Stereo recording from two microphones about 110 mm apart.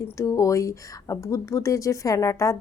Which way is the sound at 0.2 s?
30° left (ahead or behind).